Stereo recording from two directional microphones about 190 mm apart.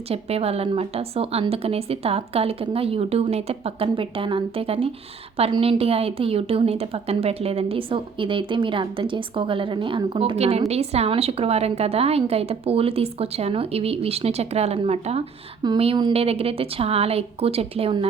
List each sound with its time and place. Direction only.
0.1 s a woman's voice: 30° right (ahead or behind)